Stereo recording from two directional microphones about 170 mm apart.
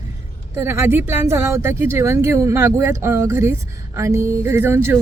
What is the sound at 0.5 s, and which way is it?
Speech, 15° right (ahead or behind).